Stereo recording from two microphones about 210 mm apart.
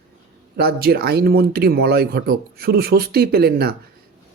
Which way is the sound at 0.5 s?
50° right (ahead or behind).